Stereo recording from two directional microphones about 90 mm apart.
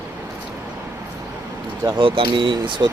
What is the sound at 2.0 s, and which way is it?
Speech, 80° right.